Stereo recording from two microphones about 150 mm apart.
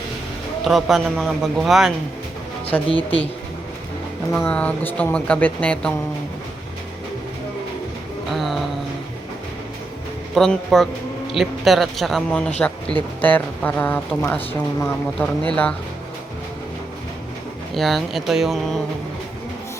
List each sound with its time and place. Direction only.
0.6 s a man's voice: centre (ahead or behind)
2.9 s speech: 40° left (ahead or behind)
4.3 s speech: 15° left (ahead or behind)
8.3 s a sound: centre (ahead or behind)
10.3 s a man's voice: centre (ahead or behind)
17.7 s a man's voice: centre (ahead or behind)